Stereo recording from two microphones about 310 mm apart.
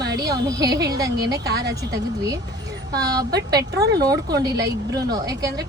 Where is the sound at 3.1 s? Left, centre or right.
Centre.